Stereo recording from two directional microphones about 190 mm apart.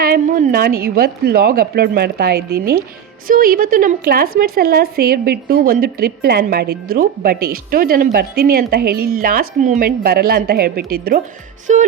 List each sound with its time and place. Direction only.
0.0 s a woman's voice: 45° right (ahead or behind)
11.7 s music: 40° right (ahead or behind)